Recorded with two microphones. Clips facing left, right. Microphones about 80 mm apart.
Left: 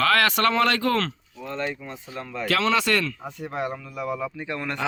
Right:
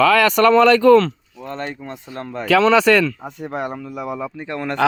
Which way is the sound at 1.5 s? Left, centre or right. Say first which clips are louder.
Right 2 dB; right.